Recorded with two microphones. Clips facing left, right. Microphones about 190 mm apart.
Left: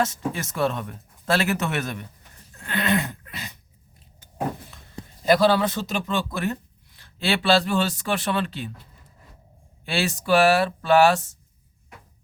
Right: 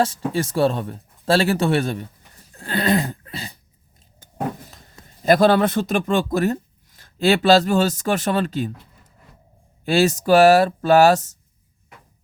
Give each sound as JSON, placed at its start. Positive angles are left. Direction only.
{"t": 0.3, "sound": "speech", "side_deg": -35}
{"t": 2.5, "sound": "a sound", "side_deg": -35}
{"t": 5.2, "sound": "speech", "side_deg": -50}
{"t": 9.8, "sound": "speech", "side_deg": -40}